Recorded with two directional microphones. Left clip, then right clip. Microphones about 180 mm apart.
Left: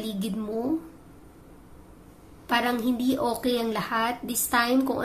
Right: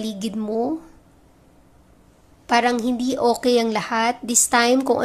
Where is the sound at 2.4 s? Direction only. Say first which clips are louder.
Right 6 dB; 40° right (ahead or behind).